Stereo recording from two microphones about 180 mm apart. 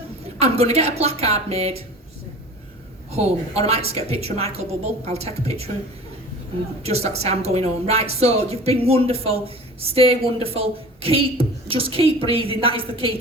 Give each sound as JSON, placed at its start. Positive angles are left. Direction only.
{"t": 0.3, "sound": "a woman's voice", "side_deg": -35}
{"t": 3.1, "sound": "a woman's voice", "side_deg": -35}
{"t": 6.8, "sound": "a woman's voice", "side_deg": -35}